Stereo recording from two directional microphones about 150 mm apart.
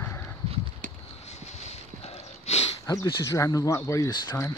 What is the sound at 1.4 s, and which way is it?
Horse, 45° left (ahead or behind).